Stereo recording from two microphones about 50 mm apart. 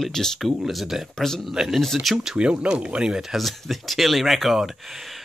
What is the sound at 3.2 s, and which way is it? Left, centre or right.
Speech, centre.